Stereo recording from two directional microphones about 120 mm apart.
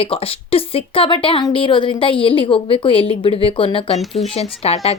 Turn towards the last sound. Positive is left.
turn(degrees=60)  # may be behind; listen again after turning